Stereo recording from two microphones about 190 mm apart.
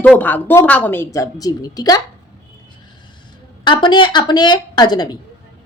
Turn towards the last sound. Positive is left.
turn(degrees=20)  # may be behind; listen again after turning